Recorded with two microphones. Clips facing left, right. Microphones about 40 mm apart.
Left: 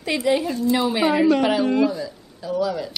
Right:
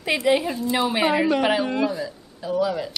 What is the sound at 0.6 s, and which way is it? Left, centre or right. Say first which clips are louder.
Speech: left 2 dB; centre.